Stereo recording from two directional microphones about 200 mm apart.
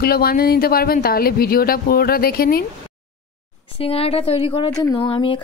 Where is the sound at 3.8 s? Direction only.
30° left (ahead or behind).